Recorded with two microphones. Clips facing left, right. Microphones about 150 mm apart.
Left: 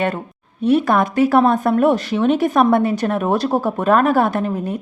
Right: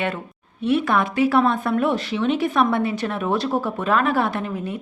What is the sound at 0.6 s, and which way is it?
Speech, 40° left (ahead or behind).